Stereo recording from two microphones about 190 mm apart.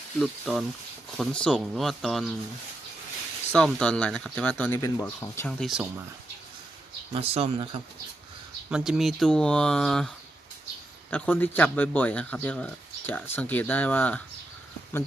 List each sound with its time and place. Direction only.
0.2 s speech: centre (ahead or behind)
3.5 s speech: 5° left (ahead or behind)
5.5 s speech: centre (ahead or behind)
7.1 s speech: 30° right (ahead or behind)
8.7 s speech: centre (ahead or behind)
11.1 s speech: 10° left (ahead or behind)